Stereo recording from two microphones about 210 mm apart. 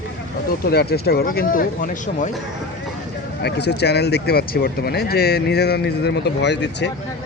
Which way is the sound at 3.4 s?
55° left (ahead or behind).